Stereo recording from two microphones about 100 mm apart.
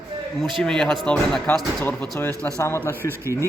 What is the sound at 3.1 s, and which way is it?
Speech, 25° right (ahead or behind).